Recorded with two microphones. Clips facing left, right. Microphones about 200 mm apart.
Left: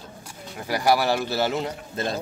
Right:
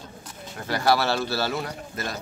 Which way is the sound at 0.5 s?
10° left (ahead or behind).